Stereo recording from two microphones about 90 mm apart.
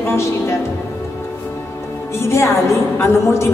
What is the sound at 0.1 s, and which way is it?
Speech, 30° left (ahead or behind).